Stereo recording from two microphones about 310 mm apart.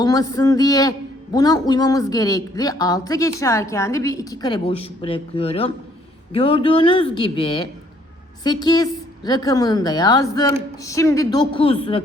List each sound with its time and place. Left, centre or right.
0.0 s a man's voice: centre